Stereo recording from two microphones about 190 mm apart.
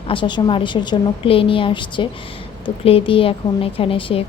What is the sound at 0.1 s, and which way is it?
A woman's voice, 25° left (ahead or behind).